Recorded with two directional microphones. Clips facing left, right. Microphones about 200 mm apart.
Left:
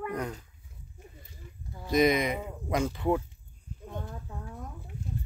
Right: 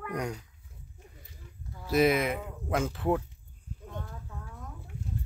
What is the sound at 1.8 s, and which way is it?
Speech, 5° right (ahead or behind).